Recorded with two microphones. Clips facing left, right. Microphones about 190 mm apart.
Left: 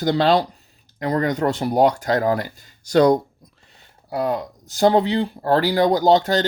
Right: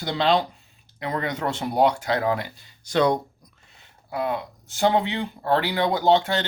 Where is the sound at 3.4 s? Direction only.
35° left (ahead or behind).